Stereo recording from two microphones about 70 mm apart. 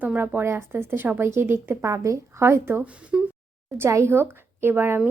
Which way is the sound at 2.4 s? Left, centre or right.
Right.